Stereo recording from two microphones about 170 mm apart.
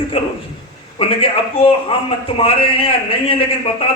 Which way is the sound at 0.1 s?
35° left (ahead or behind).